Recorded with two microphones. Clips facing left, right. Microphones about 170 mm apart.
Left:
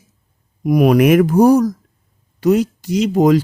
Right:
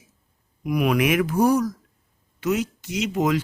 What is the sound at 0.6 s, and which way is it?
Speech, 40° left (ahead or behind).